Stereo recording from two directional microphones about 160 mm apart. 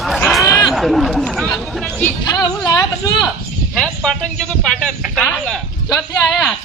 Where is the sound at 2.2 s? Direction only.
25° left (ahead or behind).